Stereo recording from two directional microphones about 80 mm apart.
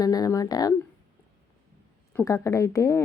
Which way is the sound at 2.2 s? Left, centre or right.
Left.